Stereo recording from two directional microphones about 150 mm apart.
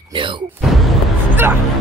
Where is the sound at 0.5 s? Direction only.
Centre (ahead or behind).